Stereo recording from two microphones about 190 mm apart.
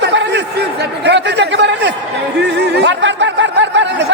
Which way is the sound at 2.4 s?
60° right (ahead or behind).